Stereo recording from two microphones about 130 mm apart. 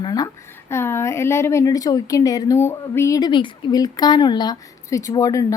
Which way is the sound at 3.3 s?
35° left (ahead or behind).